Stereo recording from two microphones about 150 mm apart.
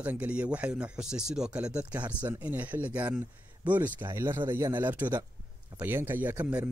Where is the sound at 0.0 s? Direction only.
10° right (ahead or behind).